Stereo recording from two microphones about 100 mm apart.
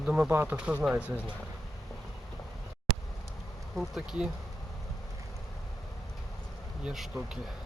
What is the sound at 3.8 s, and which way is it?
Speech, 5° right (ahead or behind).